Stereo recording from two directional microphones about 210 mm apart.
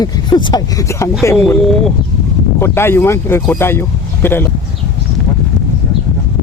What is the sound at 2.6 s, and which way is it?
Speech, 10° left (ahead or behind).